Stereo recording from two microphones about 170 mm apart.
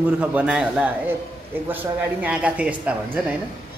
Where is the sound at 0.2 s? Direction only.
5° right (ahead or behind).